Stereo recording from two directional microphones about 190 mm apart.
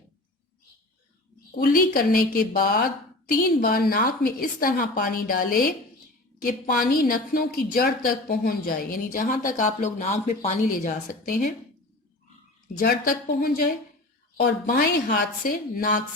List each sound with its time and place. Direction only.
1.5 s a woman's voice: 50° left (ahead or behind)
12.8 s a woman's voice: 50° left (ahead or behind)